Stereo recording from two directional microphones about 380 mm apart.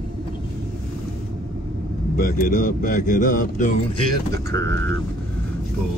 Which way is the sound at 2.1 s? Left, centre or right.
Left.